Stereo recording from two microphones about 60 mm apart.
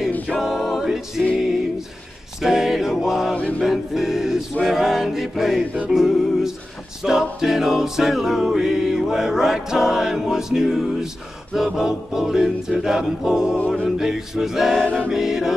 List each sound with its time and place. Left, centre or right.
0.4 s a capella: centre
2.4 s music: centre
3.3 s music: centre
3.6 s music: centre
4.6 s choir: centre
5.9 s music: centre
7.0 s a capella: centre